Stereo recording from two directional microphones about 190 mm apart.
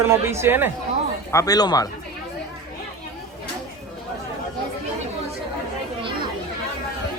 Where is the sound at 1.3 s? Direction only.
20° left (ahead or behind).